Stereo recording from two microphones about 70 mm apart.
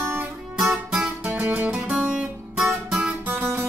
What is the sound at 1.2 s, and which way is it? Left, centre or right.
Music, right.